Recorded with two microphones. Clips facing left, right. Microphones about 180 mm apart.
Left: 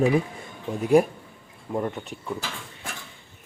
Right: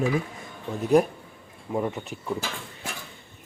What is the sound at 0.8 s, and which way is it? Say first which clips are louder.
Speech: left 1 dB; 10° left (ahead or behind).